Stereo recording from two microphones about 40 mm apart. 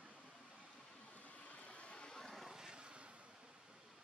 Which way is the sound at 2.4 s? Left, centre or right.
Centre.